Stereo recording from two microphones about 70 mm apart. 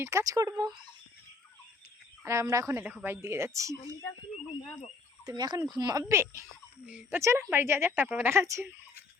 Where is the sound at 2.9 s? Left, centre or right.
Right.